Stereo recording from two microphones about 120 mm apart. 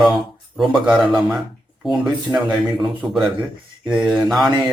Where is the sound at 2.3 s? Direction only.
20° right (ahead or behind).